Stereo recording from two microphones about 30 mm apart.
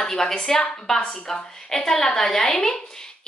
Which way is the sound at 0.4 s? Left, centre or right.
Centre.